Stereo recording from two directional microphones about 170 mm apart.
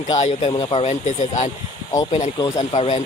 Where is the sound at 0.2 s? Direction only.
40° left (ahead or behind).